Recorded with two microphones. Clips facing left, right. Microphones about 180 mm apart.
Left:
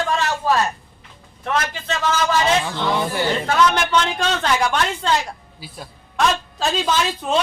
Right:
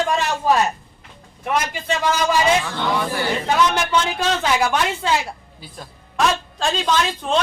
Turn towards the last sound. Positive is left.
turn(degrees=5)  # may be behind; listen again after turning